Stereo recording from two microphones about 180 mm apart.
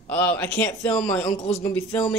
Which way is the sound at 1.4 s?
35° left (ahead or behind).